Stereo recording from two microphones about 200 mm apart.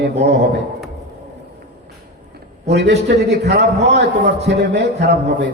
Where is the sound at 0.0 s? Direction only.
55° right (ahead or behind).